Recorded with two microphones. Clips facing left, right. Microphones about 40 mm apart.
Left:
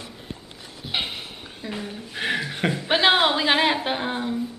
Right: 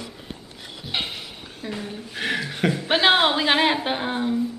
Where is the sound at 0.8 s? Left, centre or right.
Centre.